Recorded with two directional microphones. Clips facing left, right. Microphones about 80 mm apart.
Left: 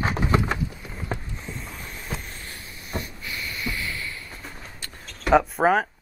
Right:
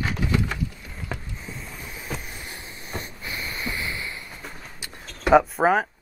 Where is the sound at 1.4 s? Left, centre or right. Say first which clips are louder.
Left 1 dB; centre; by 4.2 s right.